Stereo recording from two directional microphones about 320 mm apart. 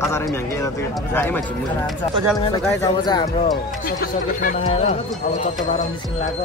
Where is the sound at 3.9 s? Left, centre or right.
Left.